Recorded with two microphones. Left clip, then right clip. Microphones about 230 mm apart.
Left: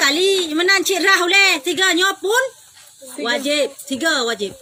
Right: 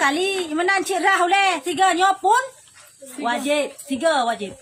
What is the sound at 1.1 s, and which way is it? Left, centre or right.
Speech, right.